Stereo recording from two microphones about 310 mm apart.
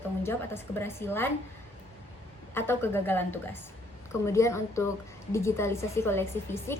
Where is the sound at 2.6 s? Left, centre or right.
Centre.